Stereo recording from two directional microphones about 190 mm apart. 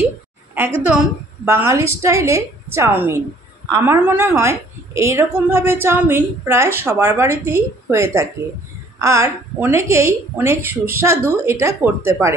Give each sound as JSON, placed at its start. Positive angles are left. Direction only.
{"t": 0.6, "sound": "a woman's voice", "side_deg": -10}